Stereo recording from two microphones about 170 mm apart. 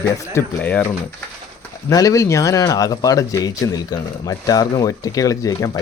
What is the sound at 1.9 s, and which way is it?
Speech, 20° left (ahead or behind).